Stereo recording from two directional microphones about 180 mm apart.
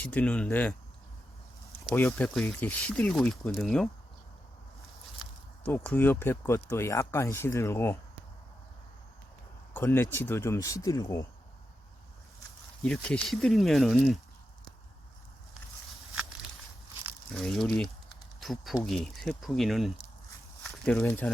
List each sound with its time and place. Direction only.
0.0 s speech: 10° left (ahead or behind)
2.0 s speech: 10° left (ahead or behind)
5.6 s speech: 10° left (ahead or behind)
9.7 s speech: 10° left (ahead or behind)
12.8 s speech: 5° left (ahead or behind)
17.3 s speech: centre (ahead or behind)